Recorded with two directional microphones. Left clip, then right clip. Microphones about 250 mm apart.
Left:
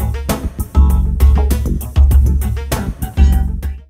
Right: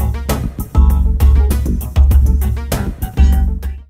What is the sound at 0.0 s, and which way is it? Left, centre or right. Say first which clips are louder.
Music: even; centre.